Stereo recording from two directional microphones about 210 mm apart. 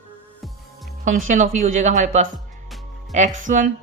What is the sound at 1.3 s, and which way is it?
Speech, 35° right (ahead or behind).